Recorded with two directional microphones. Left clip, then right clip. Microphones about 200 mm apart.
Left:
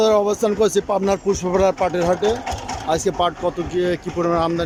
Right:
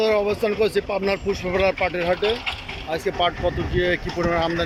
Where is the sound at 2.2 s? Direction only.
40° left (ahead or behind).